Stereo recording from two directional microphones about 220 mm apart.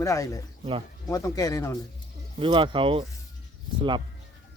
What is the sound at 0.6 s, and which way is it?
Speech, 25° right (ahead or behind).